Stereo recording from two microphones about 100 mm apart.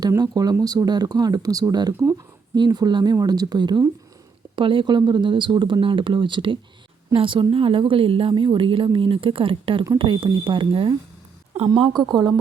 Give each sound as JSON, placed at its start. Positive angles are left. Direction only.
{"t": 0.2, "sound": "a woman's voice", "side_deg": -40}
{"t": 4.5, "sound": "speech", "side_deg": -60}
{"t": 11.7, "sound": "a woman's voice", "side_deg": -45}